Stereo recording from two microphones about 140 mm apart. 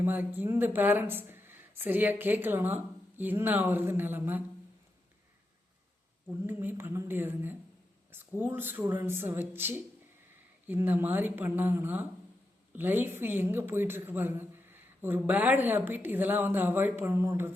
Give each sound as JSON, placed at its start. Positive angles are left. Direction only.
{"t": 0.0, "sound": "a woman's voice", "side_deg": -15}
{"t": 6.4, "sound": "a woman's voice", "side_deg": -15}